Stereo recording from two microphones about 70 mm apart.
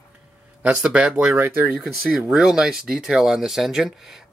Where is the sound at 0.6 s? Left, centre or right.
Centre.